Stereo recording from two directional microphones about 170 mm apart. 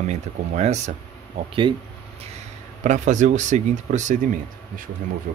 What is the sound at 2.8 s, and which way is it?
Speech, 45° right (ahead or behind).